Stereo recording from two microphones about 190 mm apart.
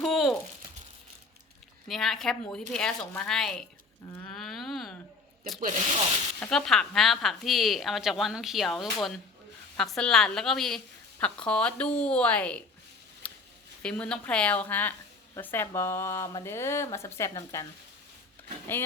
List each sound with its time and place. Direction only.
0.0 s a sound: centre (ahead or behind)
1.9 s speech: centre (ahead or behind)
4.2 s a sound: 5° left (ahead or behind)
5.5 s speech: 45° right (ahead or behind)
6.4 s speech: centre (ahead or behind)
13.8 s speech: 5° left (ahead or behind)